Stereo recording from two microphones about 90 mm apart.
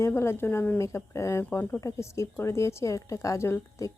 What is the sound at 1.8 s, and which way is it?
Speech, 35° left (ahead or behind).